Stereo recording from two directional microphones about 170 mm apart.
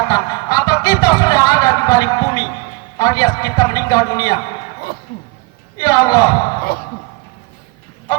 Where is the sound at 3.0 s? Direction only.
20° left (ahead or behind).